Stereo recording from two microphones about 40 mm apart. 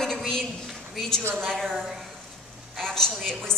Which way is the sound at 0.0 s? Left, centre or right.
Centre.